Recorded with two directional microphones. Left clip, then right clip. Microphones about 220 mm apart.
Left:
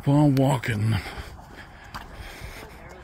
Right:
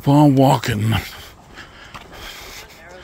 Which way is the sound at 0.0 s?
35° right (ahead or behind).